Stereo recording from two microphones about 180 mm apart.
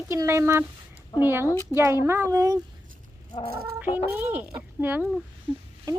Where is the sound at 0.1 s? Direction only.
15° right (ahead or behind).